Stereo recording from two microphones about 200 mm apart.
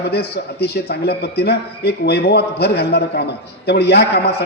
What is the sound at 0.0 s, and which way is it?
A man's voice, 55° left (ahead or behind).